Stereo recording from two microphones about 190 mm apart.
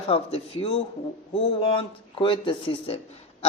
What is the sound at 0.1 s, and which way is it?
Speech, 30° left (ahead or behind).